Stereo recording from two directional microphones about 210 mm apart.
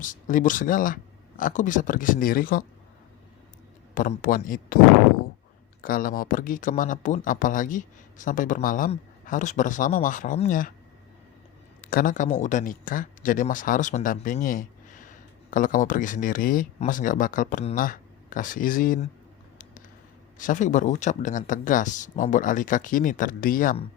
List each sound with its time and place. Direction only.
0.0 s speech: 40° left (ahead or behind)
3.9 s speech: 40° left (ahead or behind)
5.8 s speech: 40° left (ahead or behind)
11.8 s speech: 40° left (ahead or behind)
20.4 s speech: 35° left (ahead or behind)